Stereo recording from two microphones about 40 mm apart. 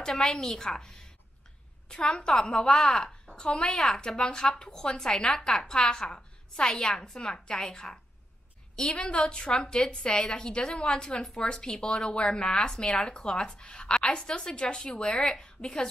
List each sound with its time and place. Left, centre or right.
0.4 s a woman's voice: centre
8.9 s a woman's voice: left